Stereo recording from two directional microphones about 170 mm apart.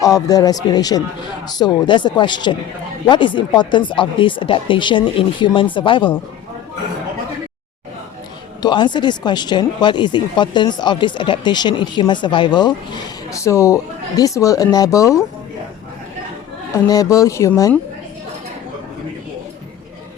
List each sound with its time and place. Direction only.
0.0 s speech: 20° left (ahead or behind)
8.6 s speech: 25° left (ahead or behind)
16.7 s speech: 20° left (ahead or behind)